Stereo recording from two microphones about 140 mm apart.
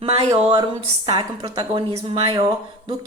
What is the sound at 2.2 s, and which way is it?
Speech, 45° right (ahead or behind).